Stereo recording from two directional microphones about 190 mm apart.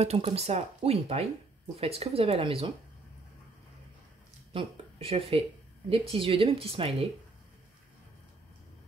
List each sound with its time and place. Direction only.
0.0 s speech: 35° right (ahead or behind)
4.5 s speech: 30° right (ahead or behind)